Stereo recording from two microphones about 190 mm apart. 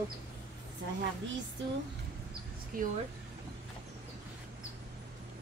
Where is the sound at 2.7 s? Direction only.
50° right (ahead or behind).